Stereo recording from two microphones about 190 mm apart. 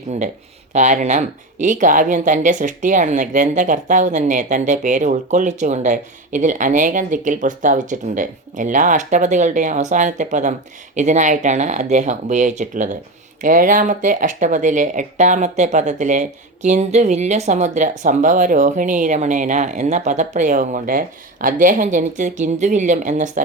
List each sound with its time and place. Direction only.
0.7 s speech: 40° right (ahead or behind)